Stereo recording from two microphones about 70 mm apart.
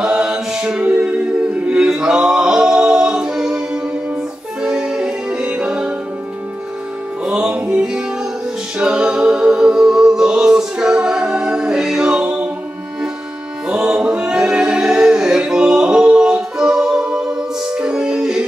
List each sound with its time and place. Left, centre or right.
0.0 s a capella: centre
4.6 s music: centre
7.2 s music: centre
13.7 s music: centre
13.9 s singing: centre